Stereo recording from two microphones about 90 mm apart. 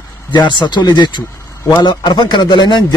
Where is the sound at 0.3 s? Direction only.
60° left (ahead or behind).